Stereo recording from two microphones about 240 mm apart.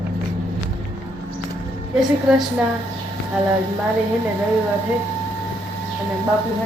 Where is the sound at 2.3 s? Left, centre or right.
Centre.